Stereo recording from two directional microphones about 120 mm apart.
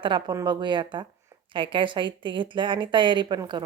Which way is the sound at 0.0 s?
40° right (ahead or behind).